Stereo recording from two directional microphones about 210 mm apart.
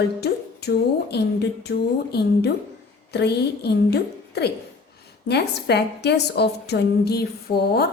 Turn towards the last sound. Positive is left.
turn(degrees=50)  # may be behind; listen again after turning